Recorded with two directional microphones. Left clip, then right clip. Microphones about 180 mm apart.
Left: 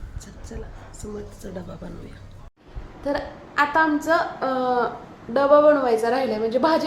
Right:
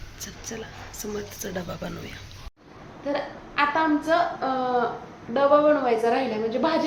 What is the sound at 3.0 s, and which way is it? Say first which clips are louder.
A woman's voice: left 2 dB; 35° left (ahead or behind).